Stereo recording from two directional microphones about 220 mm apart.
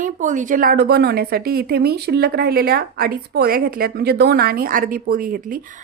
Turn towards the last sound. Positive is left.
turn(degrees=-40)  # may be behind; listen again after turning